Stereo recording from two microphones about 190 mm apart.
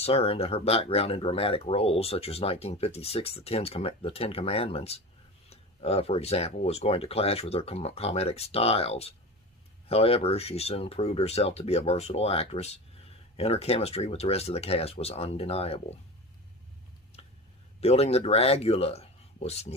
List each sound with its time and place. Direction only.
0.0 s speech: 30° left (ahead or behind)
17.7 s speech: 35° left (ahead or behind)